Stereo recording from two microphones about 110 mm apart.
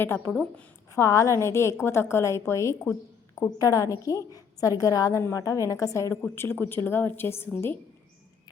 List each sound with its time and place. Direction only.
0.0 s a woman's voice: 20° left (ahead or behind)
0.9 s a woman's voice: 30° left (ahead or behind)